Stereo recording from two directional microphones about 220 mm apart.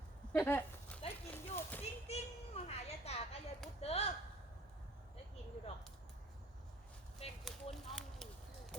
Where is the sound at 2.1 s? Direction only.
30° left (ahead or behind).